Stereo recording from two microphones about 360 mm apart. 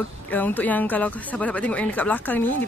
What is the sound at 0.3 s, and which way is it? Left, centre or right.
A woman's voice, centre.